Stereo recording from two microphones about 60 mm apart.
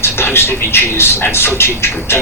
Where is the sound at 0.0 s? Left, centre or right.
Left.